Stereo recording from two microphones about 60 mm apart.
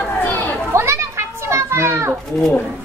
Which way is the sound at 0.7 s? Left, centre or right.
Right.